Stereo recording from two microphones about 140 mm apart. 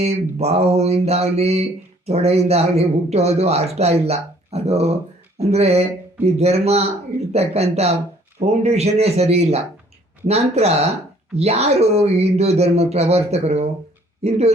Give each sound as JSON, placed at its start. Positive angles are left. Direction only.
{"t": 0.0, "sound": "speech", "side_deg": -50}